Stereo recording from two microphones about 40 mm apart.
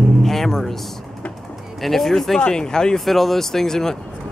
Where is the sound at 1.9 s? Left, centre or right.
Centre.